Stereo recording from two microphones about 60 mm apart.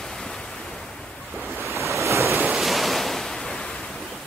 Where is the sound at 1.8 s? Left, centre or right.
Right.